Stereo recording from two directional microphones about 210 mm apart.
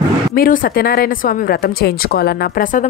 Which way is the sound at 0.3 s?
45° left (ahead or behind).